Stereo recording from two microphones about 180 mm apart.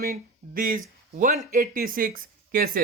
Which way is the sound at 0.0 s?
55° right (ahead or behind).